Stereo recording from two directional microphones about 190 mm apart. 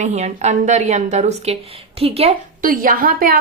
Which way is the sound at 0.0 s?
35° right (ahead or behind).